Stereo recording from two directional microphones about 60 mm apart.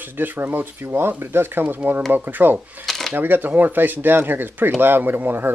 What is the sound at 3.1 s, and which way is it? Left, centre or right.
Speech, right.